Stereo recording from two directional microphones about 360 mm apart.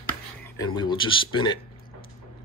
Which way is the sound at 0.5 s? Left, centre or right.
Centre.